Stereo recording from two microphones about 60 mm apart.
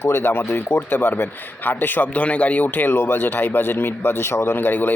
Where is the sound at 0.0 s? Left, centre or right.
Left.